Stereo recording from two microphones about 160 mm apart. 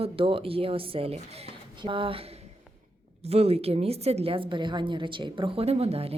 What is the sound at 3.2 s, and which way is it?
A woman's voice, 40° right (ahead or behind).